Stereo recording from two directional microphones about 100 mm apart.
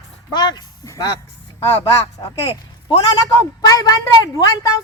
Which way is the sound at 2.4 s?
70° left (ahead or behind).